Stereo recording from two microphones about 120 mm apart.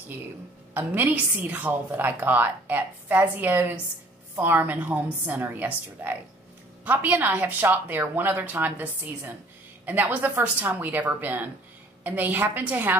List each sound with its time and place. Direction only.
0.7 s a woman's voice: 15° right (ahead or behind)